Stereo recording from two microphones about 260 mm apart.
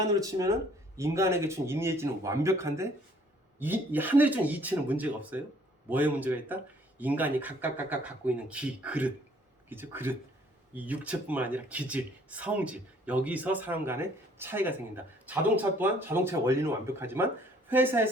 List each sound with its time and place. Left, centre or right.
0.0 s speech: centre